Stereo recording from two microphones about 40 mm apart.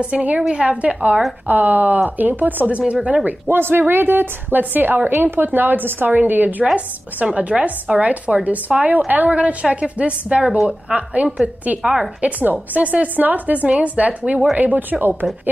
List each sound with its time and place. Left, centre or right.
0.0 s a woman's voice: right
1.5 s speech: right
2.9 s speech: right
3.4 s a woman's voice: right
6.6 s speech: right
9.3 s a woman's voice: right
11.3 s speech: right
14.6 s speech: right